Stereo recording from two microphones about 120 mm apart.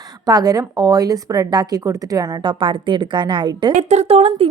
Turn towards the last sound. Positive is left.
turn(degrees=-55)  # may be behind; listen again after turning